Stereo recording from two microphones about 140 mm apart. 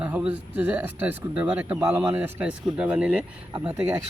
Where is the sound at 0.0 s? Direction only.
10° right (ahead or behind).